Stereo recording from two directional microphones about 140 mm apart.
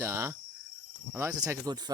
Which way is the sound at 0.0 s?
20° right (ahead or behind).